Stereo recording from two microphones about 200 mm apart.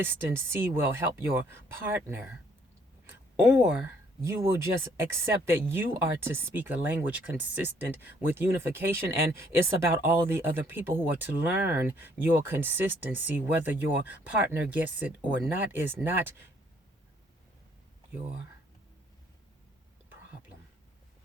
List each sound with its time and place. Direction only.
0.0 s speech: 10° right (ahead or behind)
3.4 s speech: 10° right (ahead or behind)